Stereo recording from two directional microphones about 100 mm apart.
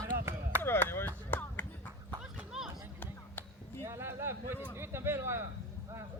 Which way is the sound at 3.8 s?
25° right (ahead or behind).